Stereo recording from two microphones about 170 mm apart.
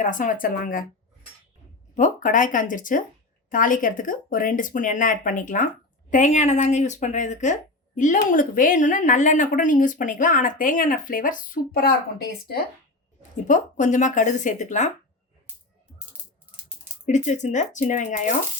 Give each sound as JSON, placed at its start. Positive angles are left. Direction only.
{"t": 0.0, "sound": "speech", "side_deg": 50}
{"t": 2.0, "sound": "speech", "side_deg": 50}
{"t": 13.5, "sound": "speech", "side_deg": 45}
{"t": 17.1, "sound": "speech", "side_deg": 45}